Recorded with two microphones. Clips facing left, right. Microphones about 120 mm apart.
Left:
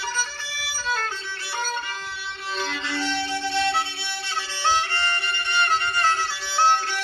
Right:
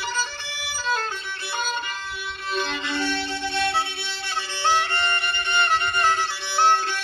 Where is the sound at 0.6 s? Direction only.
20° right (ahead or behind).